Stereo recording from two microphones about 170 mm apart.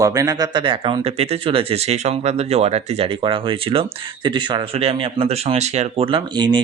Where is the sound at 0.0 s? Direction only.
20° right (ahead or behind).